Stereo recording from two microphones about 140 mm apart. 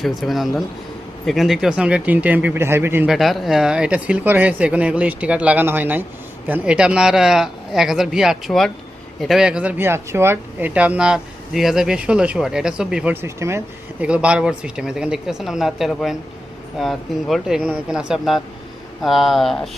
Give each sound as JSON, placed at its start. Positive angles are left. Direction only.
{"t": 0.0, "sound": "speech", "side_deg": 0}
{"t": 3.1, "sound": "speech", "side_deg": 0}
{"t": 13.2, "sound": "speech", "side_deg": -20}
{"t": 14.0, "sound": "speech", "side_deg": -10}